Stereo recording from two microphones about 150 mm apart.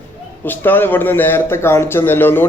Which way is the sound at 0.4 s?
15° left (ahead or behind).